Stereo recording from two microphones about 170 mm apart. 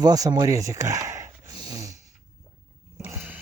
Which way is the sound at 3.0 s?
10° right (ahead or behind).